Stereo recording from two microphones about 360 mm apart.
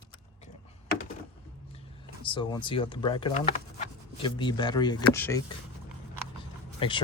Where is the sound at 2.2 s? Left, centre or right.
Centre.